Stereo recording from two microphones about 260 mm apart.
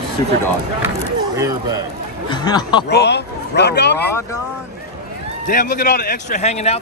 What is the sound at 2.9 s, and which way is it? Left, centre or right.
Speech, left.